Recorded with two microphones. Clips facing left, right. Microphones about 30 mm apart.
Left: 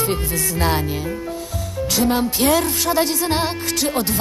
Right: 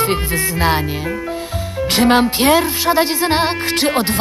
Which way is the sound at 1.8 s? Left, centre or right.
Right.